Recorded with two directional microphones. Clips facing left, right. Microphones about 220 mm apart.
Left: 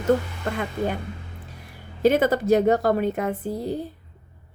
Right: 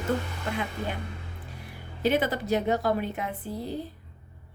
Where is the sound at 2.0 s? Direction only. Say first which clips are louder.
Left 7 dB; 45° left (ahead or behind).